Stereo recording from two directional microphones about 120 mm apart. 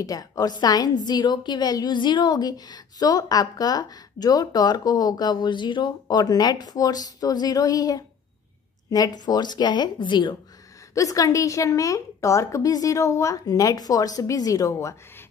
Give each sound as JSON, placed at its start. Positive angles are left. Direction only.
{"t": 0.0, "sound": "a woman's voice", "side_deg": 30}
{"t": 11.0, "sound": "a woman's voice", "side_deg": 30}